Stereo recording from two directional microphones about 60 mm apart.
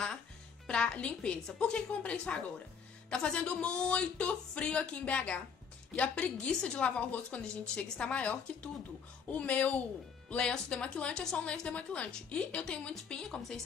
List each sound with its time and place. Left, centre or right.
0.7 s a woman's voice: centre